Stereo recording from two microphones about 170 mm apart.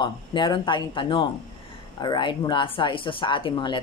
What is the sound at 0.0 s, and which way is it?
Speech, 25° left (ahead or behind).